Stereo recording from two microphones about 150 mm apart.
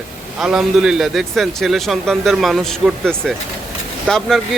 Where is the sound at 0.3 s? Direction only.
5° right (ahead or behind).